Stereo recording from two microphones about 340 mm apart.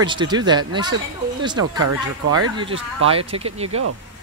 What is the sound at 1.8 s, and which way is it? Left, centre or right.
Speech, right.